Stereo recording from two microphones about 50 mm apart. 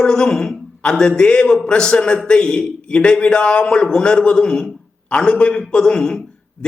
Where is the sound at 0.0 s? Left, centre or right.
Centre.